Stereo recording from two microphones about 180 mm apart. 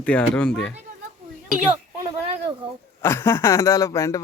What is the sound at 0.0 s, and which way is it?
Speech, 5° left (ahead or behind).